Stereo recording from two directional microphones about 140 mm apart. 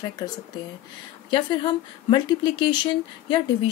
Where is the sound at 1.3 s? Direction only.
35° left (ahead or behind).